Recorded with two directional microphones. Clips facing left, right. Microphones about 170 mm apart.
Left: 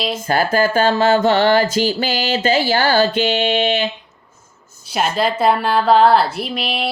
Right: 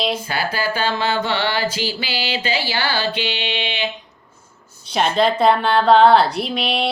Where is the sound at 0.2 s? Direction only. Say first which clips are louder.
Left 7 dB; 45° left (ahead or behind).